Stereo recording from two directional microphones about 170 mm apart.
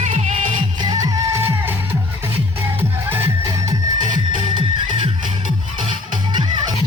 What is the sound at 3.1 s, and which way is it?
Music, 15° right (ahead or behind).